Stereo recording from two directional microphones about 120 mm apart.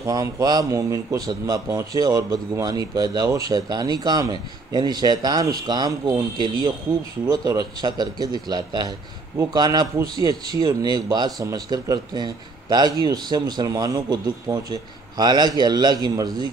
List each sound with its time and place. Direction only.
0.0 s speech: 30° right (ahead or behind)